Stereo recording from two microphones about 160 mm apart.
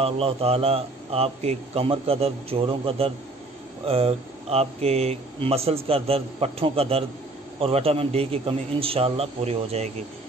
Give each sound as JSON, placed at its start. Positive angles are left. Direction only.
{"t": 0.0, "sound": "speech", "side_deg": -35}